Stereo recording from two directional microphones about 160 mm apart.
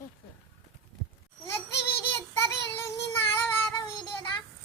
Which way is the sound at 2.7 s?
15° left (ahead or behind).